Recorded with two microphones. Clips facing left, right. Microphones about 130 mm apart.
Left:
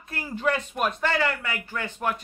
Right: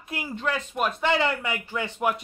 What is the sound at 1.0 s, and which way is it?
Speech, 20° right (ahead or behind).